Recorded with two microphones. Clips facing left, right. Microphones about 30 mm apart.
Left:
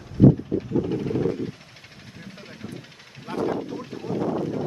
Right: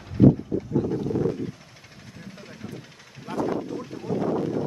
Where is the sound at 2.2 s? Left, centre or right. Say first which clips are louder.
Left 1 dB; centre.